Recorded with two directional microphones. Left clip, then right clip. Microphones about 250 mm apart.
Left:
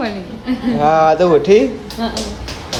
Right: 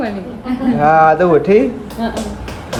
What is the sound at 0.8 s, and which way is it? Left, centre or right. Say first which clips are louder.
Speech: right 2 dB; centre.